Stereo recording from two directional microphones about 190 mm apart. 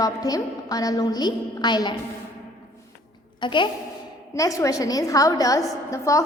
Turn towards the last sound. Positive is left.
turn(degrees=15)  # may be behind; listen again after turning